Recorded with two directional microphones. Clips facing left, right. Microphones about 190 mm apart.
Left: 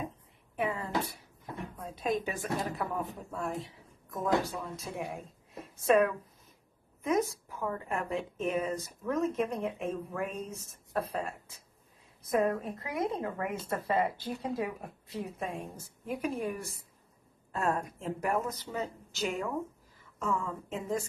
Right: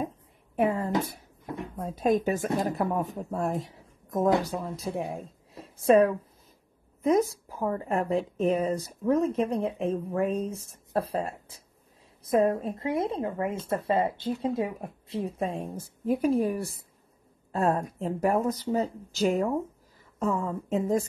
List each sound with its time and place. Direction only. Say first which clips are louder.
0.6 s a woman's voice: right 7 dB; 45° right (ahead or behind)